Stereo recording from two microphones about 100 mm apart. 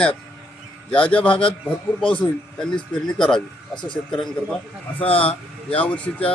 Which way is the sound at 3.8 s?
50° left (ahead or behind).